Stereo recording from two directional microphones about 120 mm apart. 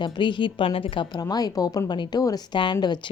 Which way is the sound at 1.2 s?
30° left (ahead or behind).